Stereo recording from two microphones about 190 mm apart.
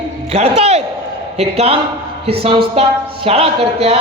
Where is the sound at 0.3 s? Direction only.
35° right (ahead or behind).